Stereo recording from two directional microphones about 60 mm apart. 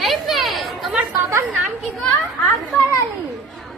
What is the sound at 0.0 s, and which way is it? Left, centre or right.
Chatter, centre.